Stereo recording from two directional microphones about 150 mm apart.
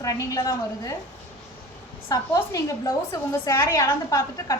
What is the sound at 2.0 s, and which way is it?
A woman's voice, 20° left (ahead or behind).